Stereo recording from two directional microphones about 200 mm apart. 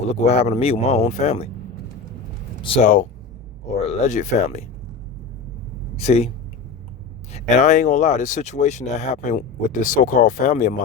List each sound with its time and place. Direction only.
0.1 s speech: 30° left (ahead or behind)
2.6 s speech: 25° left (ahead or behind)
2.8 s speech: 40° left (ahead or behind)
6.0 s speech: 35° left (ahead or behind)
7.3 s speech: 35° left (ahead or behind)